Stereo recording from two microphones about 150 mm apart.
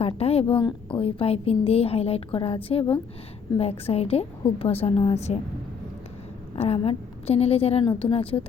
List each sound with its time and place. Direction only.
0.0 s a woman's voice: 40° left (ahead or behind)
6.6 s a woman's voice: 40° left (ahead or behind)